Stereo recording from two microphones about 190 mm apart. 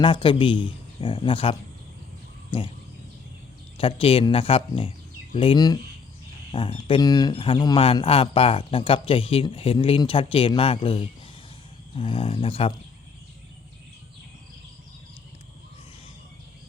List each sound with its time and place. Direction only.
0.0 s speech: 25° left (ahead or behind)
3.8 s speech: 30° left (ahead or behind)